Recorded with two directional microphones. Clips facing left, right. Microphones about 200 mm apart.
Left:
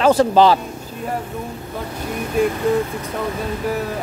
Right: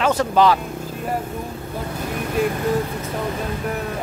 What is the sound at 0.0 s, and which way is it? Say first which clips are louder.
Speech: left 4 dB; 30° left (ahead or behind).